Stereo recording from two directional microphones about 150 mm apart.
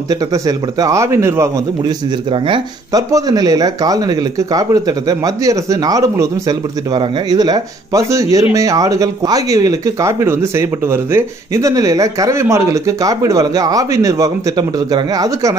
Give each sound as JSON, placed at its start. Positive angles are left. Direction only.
{"t": 0.1, "sound": "speech", "side_deg": -25}
{"t": 2.3, "sound": "speech", "side_deg": -35}